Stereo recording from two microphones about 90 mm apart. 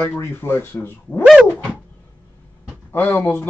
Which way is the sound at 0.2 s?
25° left (ahead or behind).